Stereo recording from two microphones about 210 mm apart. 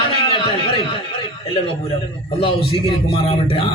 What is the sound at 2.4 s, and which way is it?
A man's voice, 25° left (ahead or behind).